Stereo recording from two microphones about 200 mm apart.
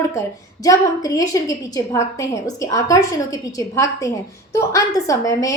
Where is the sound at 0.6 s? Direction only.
15° left (ahead or behind).